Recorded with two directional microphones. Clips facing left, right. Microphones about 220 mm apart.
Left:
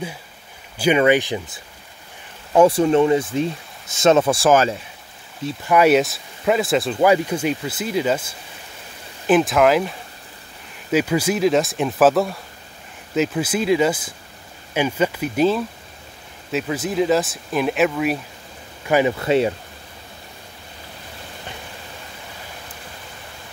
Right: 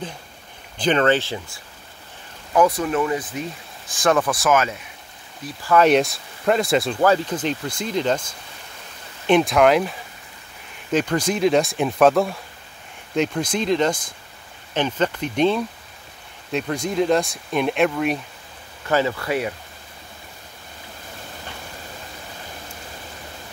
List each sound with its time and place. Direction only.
0.7 s speech: 10° left (ahead or behind)
2.5 s speech: 30° left (ahead or behind)
5.8 s speech: 5° left (ahead or behind)
18.9 s speech: 15° left (ahead or behind)